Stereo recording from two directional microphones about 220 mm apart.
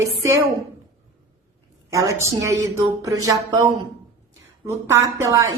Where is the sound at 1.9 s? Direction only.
15° right (ahead or behind).